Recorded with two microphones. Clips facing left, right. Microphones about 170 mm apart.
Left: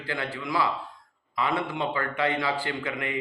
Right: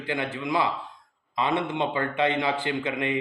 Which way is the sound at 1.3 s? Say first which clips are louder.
Right 2 dB; 20° right (ahead or behind).